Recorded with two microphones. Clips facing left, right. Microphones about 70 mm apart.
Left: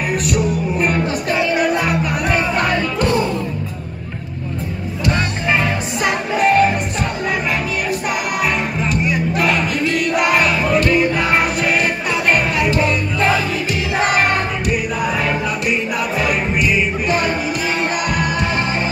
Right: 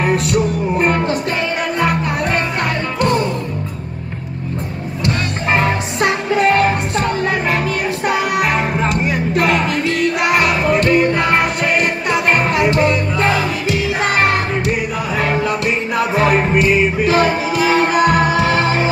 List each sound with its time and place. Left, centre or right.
0.3 s music: right
1.6 s music: centre
5.6 s music: right
8.5 s music: right
11.3 s music: right
12.6 s music: right
15.1 s music: right
17.0 s music: right
18.4 s music: right